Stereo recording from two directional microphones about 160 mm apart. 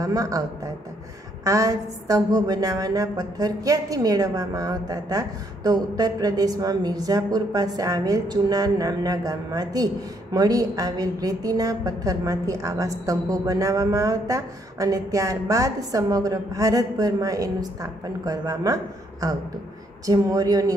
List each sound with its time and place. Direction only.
0.0 s a woman's voice: 20° right (ahead or behind)